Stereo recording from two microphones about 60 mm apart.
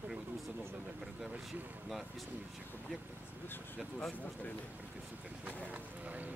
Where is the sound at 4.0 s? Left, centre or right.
Centre.